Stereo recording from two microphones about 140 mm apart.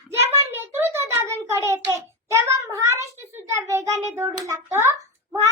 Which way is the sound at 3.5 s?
20° right (ahead or behind).